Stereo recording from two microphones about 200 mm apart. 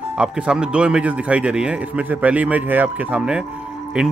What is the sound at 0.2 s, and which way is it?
A man's voice, 5° right (ahead or behind).